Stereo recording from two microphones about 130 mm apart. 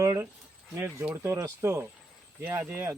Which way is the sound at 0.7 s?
15° right (ahead or behind).